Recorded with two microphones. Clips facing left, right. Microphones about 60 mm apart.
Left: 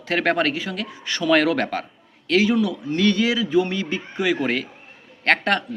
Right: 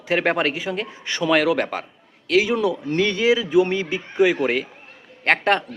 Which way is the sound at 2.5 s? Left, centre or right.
Right.